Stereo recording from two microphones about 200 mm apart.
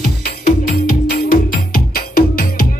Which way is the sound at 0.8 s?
45° left (ahead or behind).